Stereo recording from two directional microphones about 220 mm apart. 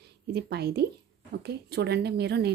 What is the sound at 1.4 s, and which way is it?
Speech, 50° right (ahead or behind).